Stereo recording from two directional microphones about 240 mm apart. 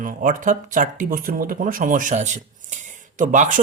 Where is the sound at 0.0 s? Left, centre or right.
Right.